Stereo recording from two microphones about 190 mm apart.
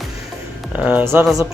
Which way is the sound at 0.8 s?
10° right (ahead or behind).